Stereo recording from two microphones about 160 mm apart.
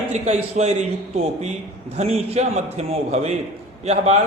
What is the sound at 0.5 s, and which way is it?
A man's voice, 45° right (ahead or behind).